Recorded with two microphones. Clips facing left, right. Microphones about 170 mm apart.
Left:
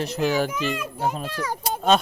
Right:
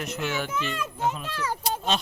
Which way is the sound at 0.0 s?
35° left (ahead or behind).